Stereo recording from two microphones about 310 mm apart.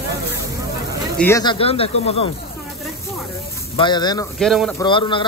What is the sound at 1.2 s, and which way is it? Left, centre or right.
A man's voice, centre.